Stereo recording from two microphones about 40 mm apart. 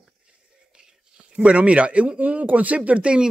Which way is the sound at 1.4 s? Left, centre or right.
Right.